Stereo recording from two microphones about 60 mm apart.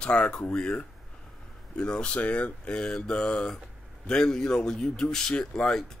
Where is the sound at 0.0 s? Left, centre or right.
Centre.